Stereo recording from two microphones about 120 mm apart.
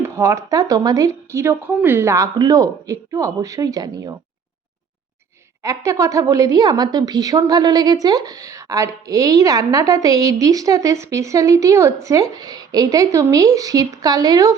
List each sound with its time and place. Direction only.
0.0 s speech: 25° right (ahead or behind)
5.6 s speech: 30° right (ahead or behind)